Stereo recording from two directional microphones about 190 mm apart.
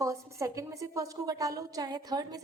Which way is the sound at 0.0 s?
15° right (ahead or behind).